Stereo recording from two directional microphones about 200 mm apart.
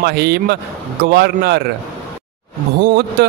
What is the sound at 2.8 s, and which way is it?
Speech, 55° right (ahead or behind).